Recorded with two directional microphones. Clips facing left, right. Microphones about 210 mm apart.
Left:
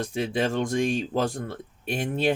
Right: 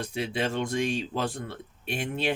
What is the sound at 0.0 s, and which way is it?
Speech, 45° left (ahead or behind).